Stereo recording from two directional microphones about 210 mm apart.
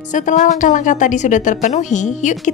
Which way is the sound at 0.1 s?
35° left (ahead or behind).